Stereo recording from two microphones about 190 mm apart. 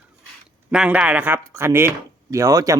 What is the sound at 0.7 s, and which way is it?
Speech, 5° right (ahead or behind).